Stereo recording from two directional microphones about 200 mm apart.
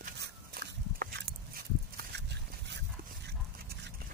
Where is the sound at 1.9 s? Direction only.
60° right (ahead or behind).